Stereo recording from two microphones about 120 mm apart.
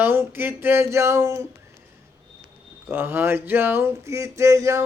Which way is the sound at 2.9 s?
20° right (ahead or behind).